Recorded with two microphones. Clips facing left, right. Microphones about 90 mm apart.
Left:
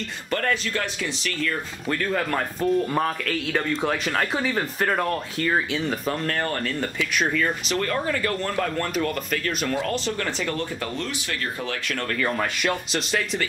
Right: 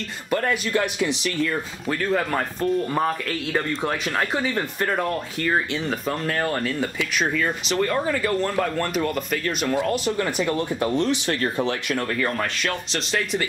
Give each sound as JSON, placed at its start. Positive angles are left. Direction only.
{"t": 0.3, "sound": "speech", "side_deg": -15}
{"t": 1.9, "sound": "a man's voice", "side_deg": -5}
{"t": 12.1, "sound": "a man's voice", "side_deg": 0}